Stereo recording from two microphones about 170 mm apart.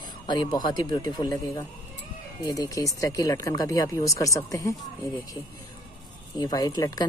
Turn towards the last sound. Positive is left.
turn(degrees=20)  # may be behind; listen again after turning